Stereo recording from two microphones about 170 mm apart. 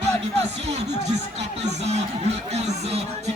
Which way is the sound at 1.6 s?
40° right (ahead or behind).